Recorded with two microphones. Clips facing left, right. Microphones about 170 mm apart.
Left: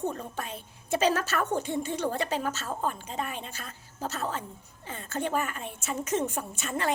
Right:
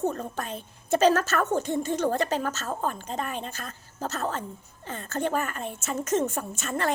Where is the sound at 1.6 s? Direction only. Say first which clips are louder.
Right 4 dB; 45° right (ahead or behind).